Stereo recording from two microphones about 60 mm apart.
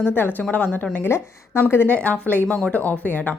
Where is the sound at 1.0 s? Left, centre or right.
Left.